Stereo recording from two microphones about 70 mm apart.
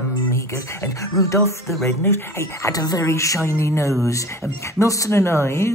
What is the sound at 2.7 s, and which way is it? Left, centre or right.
Speech, left.